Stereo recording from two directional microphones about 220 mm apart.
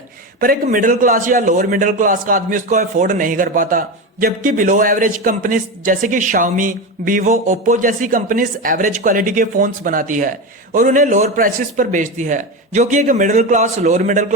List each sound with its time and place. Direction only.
0.3 s a man's voice: 40° right (ahead or behind)